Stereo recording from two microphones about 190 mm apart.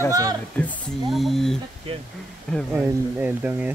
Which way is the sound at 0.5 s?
5° left (ahead or behind).